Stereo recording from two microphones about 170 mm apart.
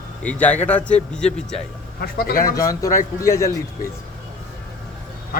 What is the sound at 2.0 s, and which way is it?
Speech, 65° left (ahead or behind).